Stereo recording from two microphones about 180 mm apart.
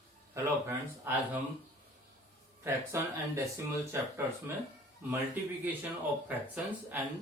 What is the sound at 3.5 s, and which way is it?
Speech, 15° right (ahead or behind).